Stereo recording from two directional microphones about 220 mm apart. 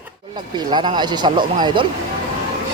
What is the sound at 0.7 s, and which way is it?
Speech, 20° right (ahead or behind).